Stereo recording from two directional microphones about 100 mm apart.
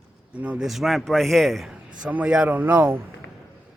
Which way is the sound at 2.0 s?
10° right (ahead or behind).